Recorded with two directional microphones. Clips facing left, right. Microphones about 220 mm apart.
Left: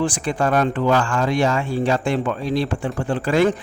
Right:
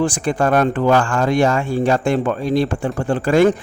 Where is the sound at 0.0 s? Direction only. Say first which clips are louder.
Right 3 dB; 45° right (ahead or behind).